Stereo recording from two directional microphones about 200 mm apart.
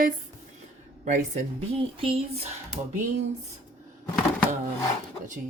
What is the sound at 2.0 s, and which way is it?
Speech, 30° right (ahead or behind).